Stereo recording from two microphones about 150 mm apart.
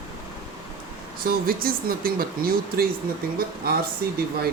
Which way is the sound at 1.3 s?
75° right (ahead or behind).